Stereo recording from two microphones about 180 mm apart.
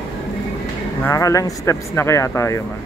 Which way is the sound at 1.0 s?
20° left (ahead or behind).